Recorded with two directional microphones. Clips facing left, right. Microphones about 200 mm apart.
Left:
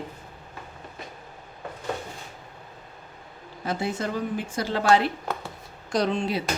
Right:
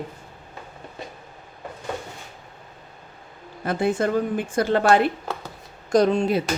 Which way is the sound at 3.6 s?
55° right (ahead or behind).